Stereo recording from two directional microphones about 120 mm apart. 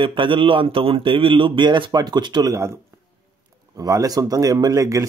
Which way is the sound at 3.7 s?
30° right (ahead or behind).